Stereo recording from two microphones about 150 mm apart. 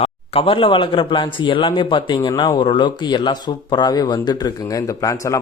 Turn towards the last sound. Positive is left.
turn(degrees=20)  # may be behind; listen again after turning